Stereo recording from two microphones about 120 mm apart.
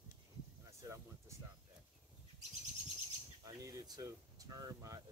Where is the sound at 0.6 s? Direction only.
25° right (ahead or behind).